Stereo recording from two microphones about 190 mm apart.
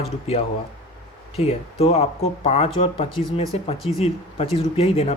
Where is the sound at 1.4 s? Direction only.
35° left (ahead or behind).